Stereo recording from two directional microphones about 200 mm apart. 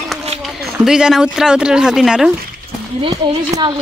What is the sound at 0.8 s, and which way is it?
Speech, 5° right (ahead or behind).